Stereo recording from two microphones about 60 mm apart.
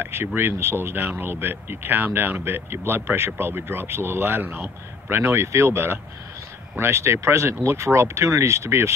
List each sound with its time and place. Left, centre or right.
0.0 s speech: right